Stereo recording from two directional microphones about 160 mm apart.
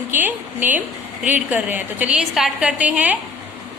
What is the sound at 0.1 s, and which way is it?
A woman's voice, 10° right (ahead or behind).